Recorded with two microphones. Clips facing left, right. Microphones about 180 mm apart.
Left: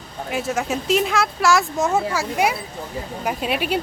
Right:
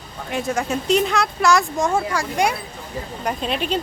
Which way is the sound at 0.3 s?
Centre (ahead or behind).